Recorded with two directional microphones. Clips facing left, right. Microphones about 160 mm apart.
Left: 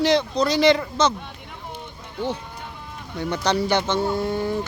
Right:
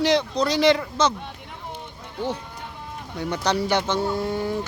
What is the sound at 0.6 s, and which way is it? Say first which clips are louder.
Speech: left 1 dB; 5° right (ahead or behind).